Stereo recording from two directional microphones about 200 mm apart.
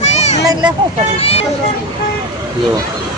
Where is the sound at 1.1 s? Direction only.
30° left (ahead or behind).